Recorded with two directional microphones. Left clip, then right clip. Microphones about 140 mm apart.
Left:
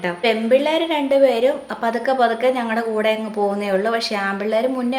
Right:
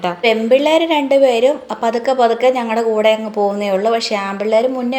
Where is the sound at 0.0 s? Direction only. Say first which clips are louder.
Right 4 dB; 25° right (ahead or behind).